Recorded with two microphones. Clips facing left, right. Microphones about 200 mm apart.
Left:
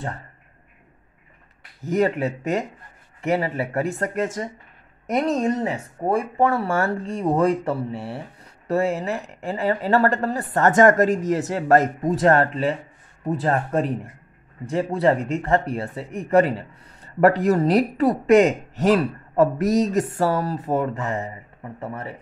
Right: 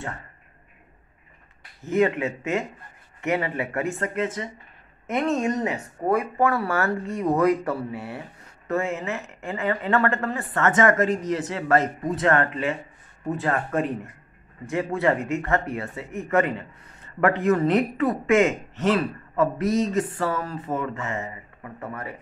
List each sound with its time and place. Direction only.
1.9 s a man's voice: 40° left (ahead or behind)
14.7 s a man's voice: 35° left (ahead or behind)